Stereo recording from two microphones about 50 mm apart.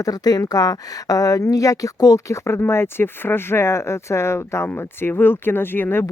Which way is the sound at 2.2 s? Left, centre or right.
Left.